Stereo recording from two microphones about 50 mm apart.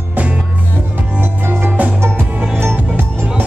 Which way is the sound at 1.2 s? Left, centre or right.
Right.